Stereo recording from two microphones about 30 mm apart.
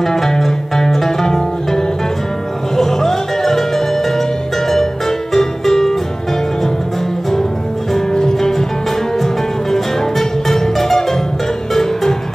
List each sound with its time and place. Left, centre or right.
0.0 s music: centre
5.3 s music: centre
8.1 s music: left